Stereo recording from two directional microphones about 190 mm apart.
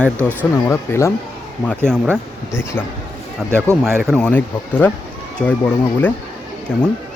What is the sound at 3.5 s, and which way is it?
Speech, 15° right (ahead or behind).